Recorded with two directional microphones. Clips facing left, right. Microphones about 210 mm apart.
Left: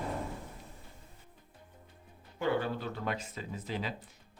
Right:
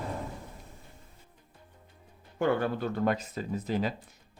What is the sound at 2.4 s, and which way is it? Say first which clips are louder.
Speech: right 4 dB; 55° right (ahead or behind).